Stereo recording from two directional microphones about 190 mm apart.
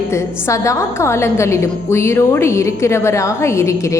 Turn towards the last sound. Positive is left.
turn(degrees=15)  # may be behind; listen again after turning